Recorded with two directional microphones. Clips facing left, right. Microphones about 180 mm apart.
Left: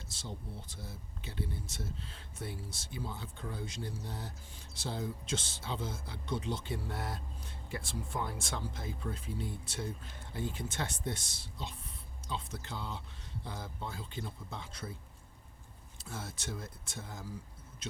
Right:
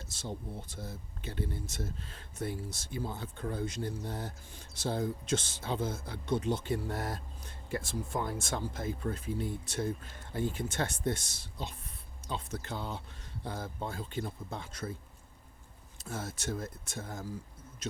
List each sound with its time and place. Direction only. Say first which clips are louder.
0.1 s speech: right 5 dB; 45° right (ahead or behind)
16.0 s speech: right 5 dB; 45° right (ahead or behind)